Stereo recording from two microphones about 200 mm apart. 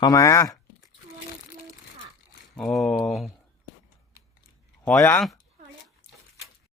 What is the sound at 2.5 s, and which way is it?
Speech, centre (ahead or behind).